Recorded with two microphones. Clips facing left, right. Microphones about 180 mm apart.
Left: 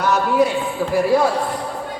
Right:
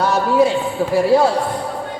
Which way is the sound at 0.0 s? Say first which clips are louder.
Right 2 dB; 30° right (ahead or behind).